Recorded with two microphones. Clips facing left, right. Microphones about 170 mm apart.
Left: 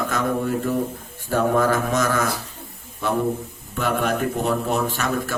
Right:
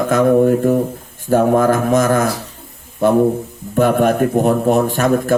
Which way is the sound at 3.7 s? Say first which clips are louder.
Right 9 dB; 50° right (ahead or behind).